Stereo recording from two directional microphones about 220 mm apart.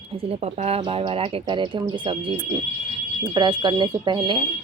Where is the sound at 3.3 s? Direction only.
20° right (ahead or behind).